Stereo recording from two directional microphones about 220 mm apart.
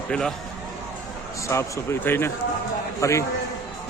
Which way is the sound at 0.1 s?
5° left (ahead or behind).